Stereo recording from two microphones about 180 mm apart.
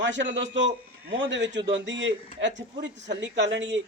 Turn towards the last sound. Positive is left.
turn(degrees=-80)